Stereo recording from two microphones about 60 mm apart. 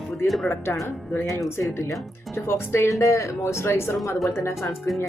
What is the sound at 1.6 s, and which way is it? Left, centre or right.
Speech, left.